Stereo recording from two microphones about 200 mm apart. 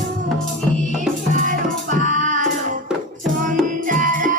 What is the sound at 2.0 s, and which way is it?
Music, 40° right (ahead or behind).